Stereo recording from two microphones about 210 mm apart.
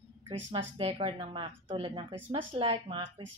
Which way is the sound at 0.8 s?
30° right (ahead or behind).